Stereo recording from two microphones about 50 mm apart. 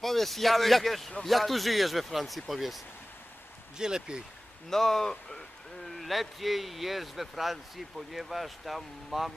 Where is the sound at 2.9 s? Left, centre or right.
Left.